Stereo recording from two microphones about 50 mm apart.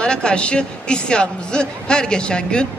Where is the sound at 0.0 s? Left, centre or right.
Centre.